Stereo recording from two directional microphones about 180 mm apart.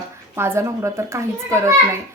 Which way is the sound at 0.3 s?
15° right (ahead or behind).